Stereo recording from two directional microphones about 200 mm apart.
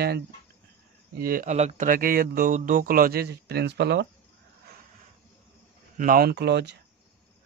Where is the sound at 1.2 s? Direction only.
45° right (ahead or behind).